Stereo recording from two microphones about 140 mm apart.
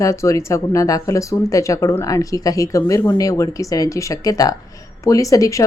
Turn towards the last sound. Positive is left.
turn(degrees=25)  # may be behind; listen again after turning